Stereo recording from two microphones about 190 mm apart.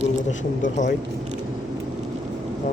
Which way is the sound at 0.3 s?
40° left (ahead or behind).